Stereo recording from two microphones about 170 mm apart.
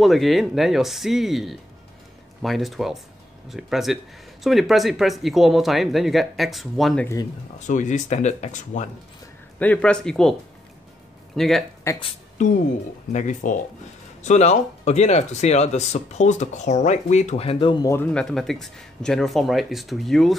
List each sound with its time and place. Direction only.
0.0 s speech: centre (ahead or behind)
7.5 s speech: 45° left (ahead or behind)
9.6 s speech: 5° left (ahead or behind)
11.3 s speech: centre (ahead or behind)
11.9 s speech: 15° left (ahead or behind)
13.1 s speech: 45° left (ahead or behind)
17.8 s speech: 15° left (ahead or behind)
18.2 s speech: centre (ahead or behind)